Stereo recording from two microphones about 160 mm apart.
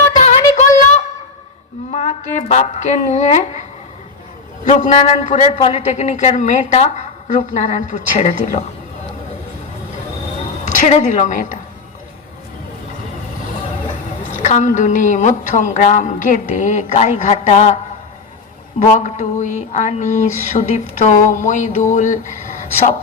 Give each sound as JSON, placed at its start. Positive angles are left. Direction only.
{"t": 0.2, "sound": "a sound", "side_deg": 45}
{"t": 1.9, "sound": "speech", "side_deg": 50}
{"t": 4.6, "sound": "speech", "side_deg": 50}
{"t": 10.8, "sound": "speech", "side_deg": 50}
{"t": 14.3, "sound": "speech", "side_deg": 50}
{"t": 18.9, "sound": "speech", "side_deg": 50}